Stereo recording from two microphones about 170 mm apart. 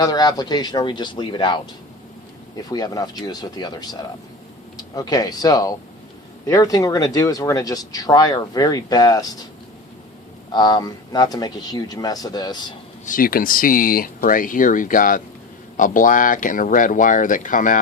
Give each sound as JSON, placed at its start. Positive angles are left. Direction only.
{"t": 0.0, "sound": "speech", "side_deg": 25}
{"t": 2.6, "sound": "speech", "side_deg": 20}
{"t": 10.5, "sound": "speech", "side_deg": 25}
{"t": 13.1, "sound": "speech", "side_deg": 55}